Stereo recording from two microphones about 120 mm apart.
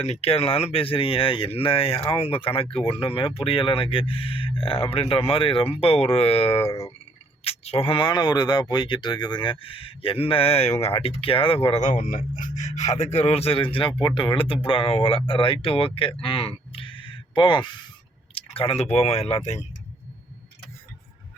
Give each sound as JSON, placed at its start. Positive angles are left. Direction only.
{"t": 0.0, "sound": "speech", "side_deg": 60}
{"t": 6.6, "sound": "speech", "side_deg": 20}
{"t": 7.4, "sound": "speech", "side_deg": 55}
{"t": 12.1, "sound": "speech", "side_deg": 90}